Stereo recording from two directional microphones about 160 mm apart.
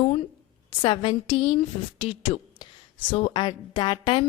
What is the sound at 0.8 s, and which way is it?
A woman's voice, 30° left (ahead or behind).